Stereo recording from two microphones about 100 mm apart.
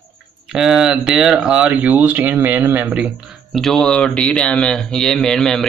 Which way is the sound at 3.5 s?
5° left (ahead or behind).